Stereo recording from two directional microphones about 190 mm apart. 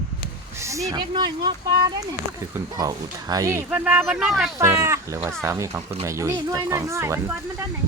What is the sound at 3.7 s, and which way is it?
Speech, 5° right (ahead or behind).